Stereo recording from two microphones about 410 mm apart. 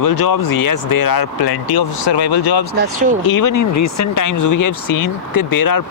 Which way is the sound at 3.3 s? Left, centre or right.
Left.